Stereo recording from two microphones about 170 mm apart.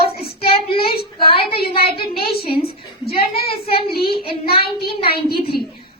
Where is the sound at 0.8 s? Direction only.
65° left (ahead or behind).